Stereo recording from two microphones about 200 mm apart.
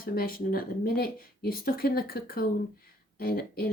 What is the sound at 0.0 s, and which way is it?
Speech, 45° left (ahead or behind).